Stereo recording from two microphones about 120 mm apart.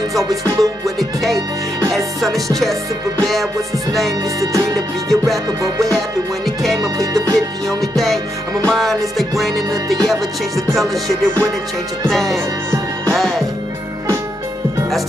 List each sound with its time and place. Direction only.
0.1 s music: 25° right (ahead or behind)
0.8 s music: centre (ahead or behind)
4.4 s music: 30° right (ahead or behind)
5.9 s music: centre (ahead or behind)
6.8 s music: 30° right (ahead or behind)
7.3 s music: centre (ahead or behind)
12.1 s music: centre (ahead or behind)